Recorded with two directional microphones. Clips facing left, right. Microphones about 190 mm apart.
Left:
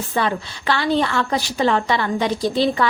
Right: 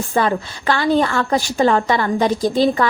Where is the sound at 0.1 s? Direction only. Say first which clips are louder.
Right 4 dB; 45° right (ahead or behind).